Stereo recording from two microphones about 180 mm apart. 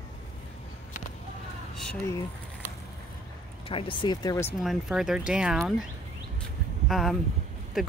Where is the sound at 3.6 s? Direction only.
30° left (ahead or behind).